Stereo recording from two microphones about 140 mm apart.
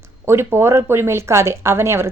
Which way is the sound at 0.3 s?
15° right (ahead or behind).